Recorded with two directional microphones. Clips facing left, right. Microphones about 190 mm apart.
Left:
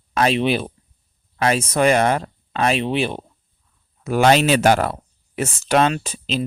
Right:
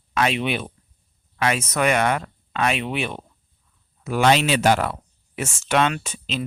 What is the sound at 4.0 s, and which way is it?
Speech, 40° left (ahead or behind).